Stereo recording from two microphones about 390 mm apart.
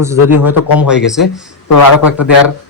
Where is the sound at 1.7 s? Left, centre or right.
Left.